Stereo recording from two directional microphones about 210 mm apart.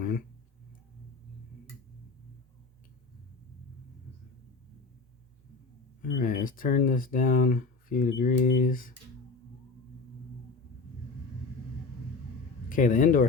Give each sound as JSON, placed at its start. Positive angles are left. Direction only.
{"t": 6.0, "sound": "speech", "side_deg": 40}
{"t": 12.6, "sound": "speech", "side_deg": 40}